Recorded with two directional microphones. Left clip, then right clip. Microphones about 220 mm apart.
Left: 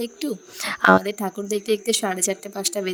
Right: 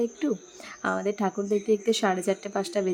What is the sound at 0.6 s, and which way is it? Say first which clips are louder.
Speech: left 13 dB; 45° left (ahead or behind).